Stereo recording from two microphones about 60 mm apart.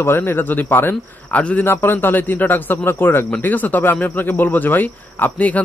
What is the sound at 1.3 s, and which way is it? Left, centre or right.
Speech, left.